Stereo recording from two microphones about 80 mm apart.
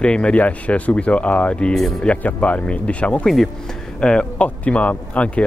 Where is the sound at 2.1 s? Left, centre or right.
Centre.